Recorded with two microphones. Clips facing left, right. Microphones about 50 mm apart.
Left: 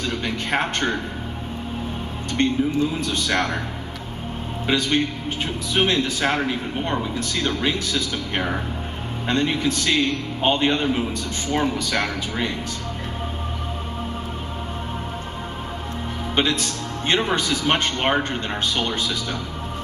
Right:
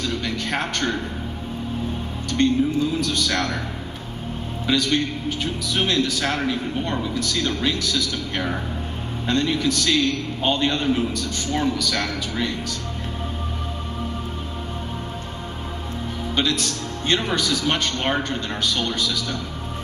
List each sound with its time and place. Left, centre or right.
0.0 s a sound: left
2.4 s a man's voice: left
4.6 s a man's voice: left
16.3 s a man's voice: left